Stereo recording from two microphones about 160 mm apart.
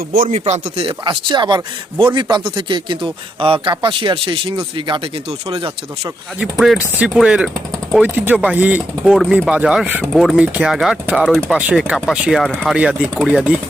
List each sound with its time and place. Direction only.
0.3 s speech: 40° right (ahead or behind)
1.0 s speech: 25° right (ahead or behind)
6.4 s speech: 5° right (ahead or behind)